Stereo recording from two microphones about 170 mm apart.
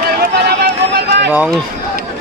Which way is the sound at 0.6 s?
70° right (ahead or behind).